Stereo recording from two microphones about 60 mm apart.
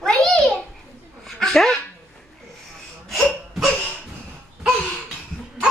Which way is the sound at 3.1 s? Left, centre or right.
Centre.